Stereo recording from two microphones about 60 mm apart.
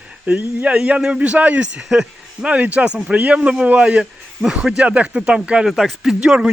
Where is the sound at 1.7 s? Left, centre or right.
Centre.